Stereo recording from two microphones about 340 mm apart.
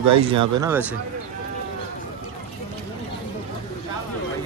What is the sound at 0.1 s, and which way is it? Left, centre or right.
Speech, centre.